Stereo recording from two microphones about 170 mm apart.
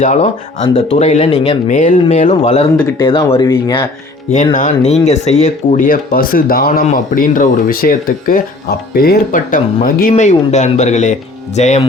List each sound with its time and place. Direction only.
0.0 s speech: 40° left (ahead or behind)
3.0 s speech: 30° left (ahead or behind)
4.5 s speech: 45° left (ahead or behind)